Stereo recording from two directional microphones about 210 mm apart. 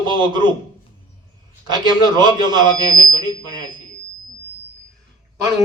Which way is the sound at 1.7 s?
20° right (ahead or behind).